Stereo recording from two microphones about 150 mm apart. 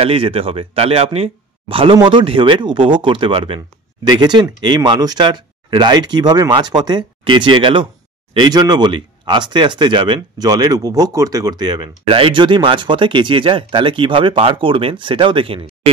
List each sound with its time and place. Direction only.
0.0 s speech: 40° right (ahead or behind)